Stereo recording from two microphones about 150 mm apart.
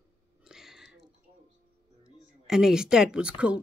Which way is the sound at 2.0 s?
5° right (ahead or behind).